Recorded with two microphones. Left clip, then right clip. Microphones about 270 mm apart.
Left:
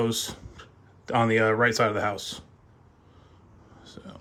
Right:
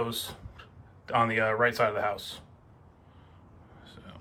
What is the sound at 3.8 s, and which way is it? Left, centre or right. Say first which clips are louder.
Vehicle: left 5 dB; left.